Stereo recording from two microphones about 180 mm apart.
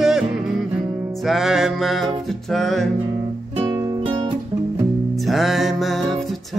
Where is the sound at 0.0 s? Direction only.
5° right (ahead or behind).